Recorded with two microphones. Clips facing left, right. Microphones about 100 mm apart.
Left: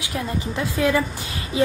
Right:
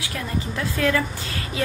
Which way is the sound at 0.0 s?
20° left (ahead or behind).